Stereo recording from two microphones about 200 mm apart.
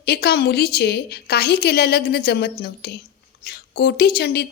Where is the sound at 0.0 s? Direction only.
55° left (ahead or behind).